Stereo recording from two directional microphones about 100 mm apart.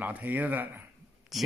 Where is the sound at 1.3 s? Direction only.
Centre (ahead or behind).